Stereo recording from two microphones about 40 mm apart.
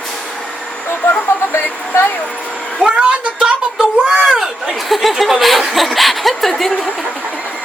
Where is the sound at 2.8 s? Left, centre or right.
Right.